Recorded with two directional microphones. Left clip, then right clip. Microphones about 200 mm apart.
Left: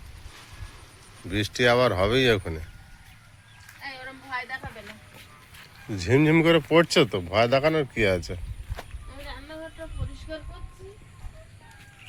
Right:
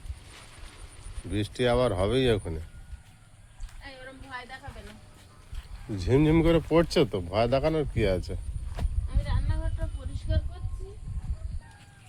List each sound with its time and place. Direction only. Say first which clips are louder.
1.3 s speech: left 5 dB; centre (ahead or behind)
3.8 s a sound: left 6 dB; 30° left (ahead or behind)
5.9 s speech: left 3 dB; centre (ahead or behind)